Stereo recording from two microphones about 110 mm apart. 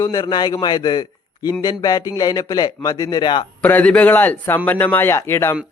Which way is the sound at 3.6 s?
15° left (ahead or behind).